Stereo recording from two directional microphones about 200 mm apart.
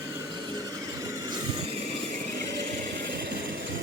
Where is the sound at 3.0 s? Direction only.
60° right (ahead or behind).